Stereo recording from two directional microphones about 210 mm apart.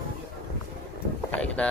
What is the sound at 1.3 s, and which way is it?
Speech, 5° left (ahead or behind).